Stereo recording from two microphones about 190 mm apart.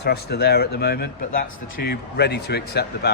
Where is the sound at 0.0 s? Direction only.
60° left (ahead or behind).